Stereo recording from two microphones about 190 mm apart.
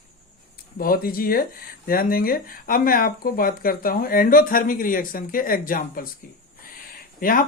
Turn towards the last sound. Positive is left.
turn(degrees=50)  # may be behind; listen again after turning